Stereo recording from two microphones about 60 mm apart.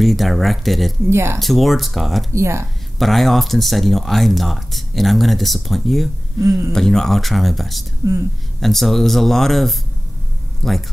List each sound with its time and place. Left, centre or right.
0.0 s speech: centre
1.1 s speech: right
1.4 s speech: centre
2.3 s speech: right
3.0 s speech: centre
8.0 s a woman's voice: right
8.5 s speech: centre